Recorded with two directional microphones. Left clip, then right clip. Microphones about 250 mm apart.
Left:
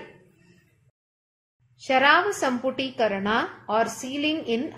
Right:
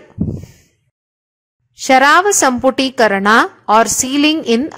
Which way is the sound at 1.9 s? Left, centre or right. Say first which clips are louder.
Right 10 dB; right.